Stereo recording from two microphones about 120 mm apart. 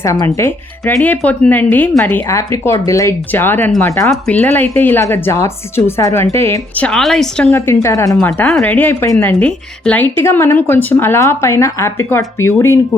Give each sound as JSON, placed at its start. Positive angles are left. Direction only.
{"t": 0.0, "sound": "a woman's voice", "side_deg": 25}
{"t": 6.8, "sound": "a woman's voice", "side_deg": 5}
{"t": 7.5, "sound": "a woman's voice", "side_deg": 20}
{"t": 8.6, "sound": "a woman's voice", "side_deg": 15}